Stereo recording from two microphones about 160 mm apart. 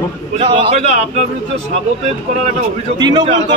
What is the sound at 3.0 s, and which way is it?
Speech, 25° right (ahead or behind).